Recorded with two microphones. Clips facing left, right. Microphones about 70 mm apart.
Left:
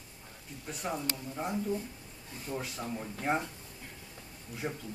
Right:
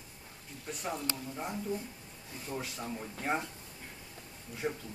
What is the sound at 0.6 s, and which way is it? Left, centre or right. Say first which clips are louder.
Speech: left 1 dB; centre.